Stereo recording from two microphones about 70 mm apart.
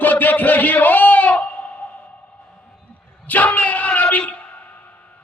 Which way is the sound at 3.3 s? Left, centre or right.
Left.